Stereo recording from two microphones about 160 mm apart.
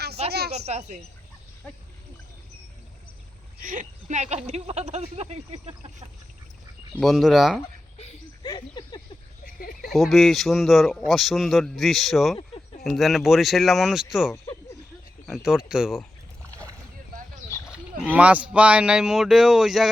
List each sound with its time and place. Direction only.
0.3 s a woman's voice: 90° right
0.5 s speech: 45° right (ahead or behind)
3.6 s speech: 55° right (ahead or behind)
7.0 s speech: centre (ahead or behind)
8.4 s a sound: 30° left (ahead or behind)
9.5 s speech: 65° left (ahead or behind)
9.9 s speech: centre (ahead or behind)
17.7 s speech: 10° right (ahead or behind)